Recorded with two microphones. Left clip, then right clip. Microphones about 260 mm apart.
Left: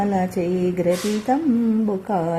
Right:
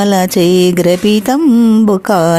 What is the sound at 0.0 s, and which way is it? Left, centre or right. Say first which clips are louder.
Music: right 11 dB; right.